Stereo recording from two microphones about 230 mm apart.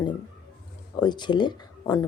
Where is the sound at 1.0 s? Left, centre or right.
Centre.